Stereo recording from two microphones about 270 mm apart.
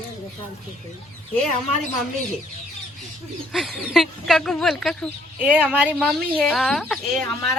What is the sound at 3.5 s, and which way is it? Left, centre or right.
Speech, centre.